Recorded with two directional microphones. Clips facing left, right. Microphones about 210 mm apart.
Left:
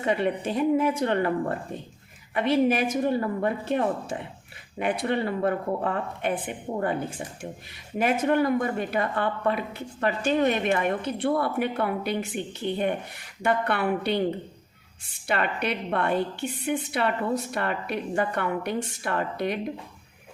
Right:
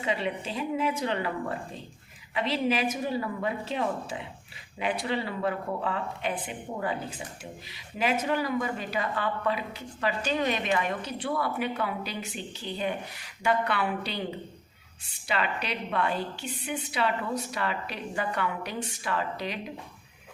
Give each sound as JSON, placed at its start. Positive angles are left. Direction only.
{"t": 0.0, "sound": "a woman's voice", "side_deg": 55}
{"t": 15.3, "sound": "a woman's voice", "side_deg": 55}